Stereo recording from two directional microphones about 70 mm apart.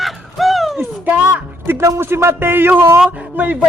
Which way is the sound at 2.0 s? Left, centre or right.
Right.